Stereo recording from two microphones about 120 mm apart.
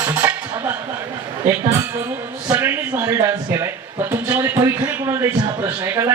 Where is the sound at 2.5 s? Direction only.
20° right (ahead or behind).